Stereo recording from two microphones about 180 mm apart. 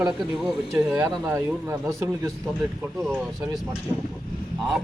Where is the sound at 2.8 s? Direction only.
5° right (ahead or behind).